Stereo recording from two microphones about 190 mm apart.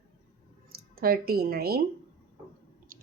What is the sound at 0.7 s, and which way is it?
Speech, 50° right (ahead or behind).